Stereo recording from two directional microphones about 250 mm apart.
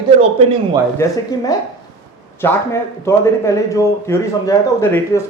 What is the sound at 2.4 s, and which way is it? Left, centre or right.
A man's voice, centre.